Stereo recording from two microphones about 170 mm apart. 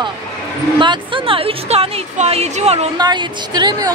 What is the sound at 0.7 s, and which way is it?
Speech, 30° right (ahead or behind).